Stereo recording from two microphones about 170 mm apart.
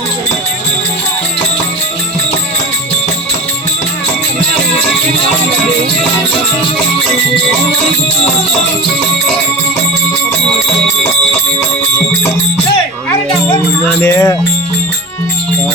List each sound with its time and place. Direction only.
14.0 s music: 15° left (ahead or behind)